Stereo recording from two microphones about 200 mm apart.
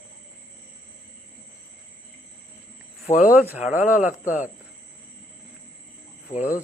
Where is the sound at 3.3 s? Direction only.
5° right (ahead or behind).